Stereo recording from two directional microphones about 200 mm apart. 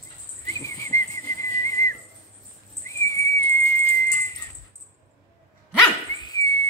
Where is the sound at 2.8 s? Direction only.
15° left (ahead or behind).